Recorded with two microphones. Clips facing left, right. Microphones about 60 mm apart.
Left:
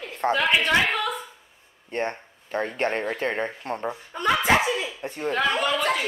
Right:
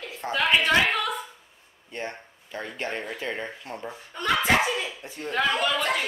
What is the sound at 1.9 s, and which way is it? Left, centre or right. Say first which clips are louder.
Speech: left 6 dB; left.